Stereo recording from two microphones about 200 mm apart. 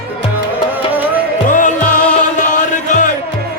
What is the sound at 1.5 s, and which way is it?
Music, 40° left (ahead or behind).